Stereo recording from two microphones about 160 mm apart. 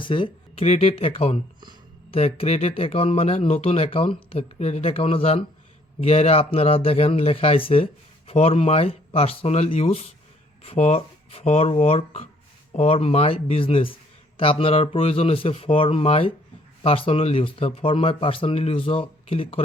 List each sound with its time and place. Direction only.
0.0 s speech: 30° left (ahead or behind)